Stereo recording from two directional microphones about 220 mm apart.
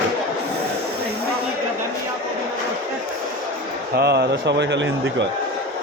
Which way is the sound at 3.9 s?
50° right (ahead or behind).